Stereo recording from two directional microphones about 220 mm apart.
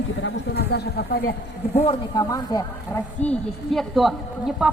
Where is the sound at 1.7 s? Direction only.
25° left (ahead or behind); by 4.7 s centre (ahead or behind).